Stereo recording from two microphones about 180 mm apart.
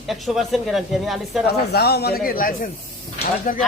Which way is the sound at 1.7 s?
65° left (ahead or behind).